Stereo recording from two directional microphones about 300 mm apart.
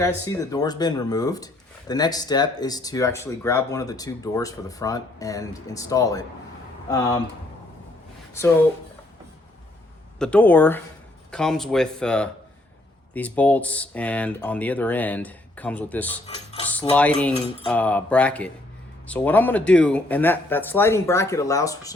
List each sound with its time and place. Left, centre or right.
0.0 s speech: centre
10.2 s speech: centre
16.3 s cutlery: centre
16.9 s speech: centre